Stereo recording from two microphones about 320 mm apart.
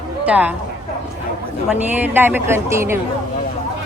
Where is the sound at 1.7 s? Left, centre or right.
Centre.